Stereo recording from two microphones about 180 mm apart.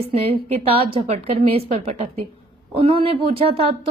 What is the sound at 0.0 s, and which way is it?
A woman's voice, 35° right (ahead or behind).